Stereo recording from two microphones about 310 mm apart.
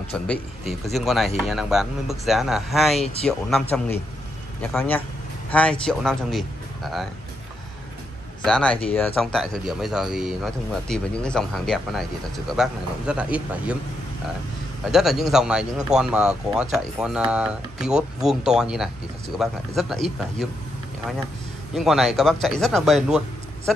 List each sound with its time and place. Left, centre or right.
0.9 s speech: centre
8.5 s speech: centre
14.9 s speech: centre
21.7 s speech: centre